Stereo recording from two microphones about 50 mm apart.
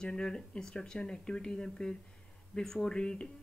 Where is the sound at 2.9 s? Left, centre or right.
Centre.